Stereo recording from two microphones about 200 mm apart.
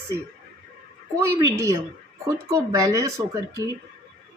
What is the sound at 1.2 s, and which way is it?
Speech, 15° right (ahead or behind).